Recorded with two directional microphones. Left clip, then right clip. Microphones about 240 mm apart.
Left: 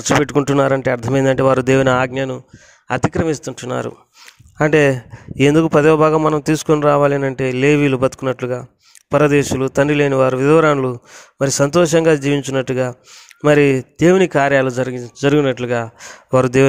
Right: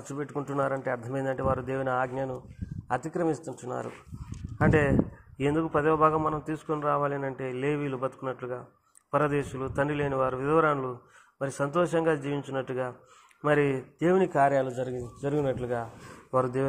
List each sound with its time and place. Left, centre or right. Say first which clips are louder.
0.2 s speech: left 15 dB; left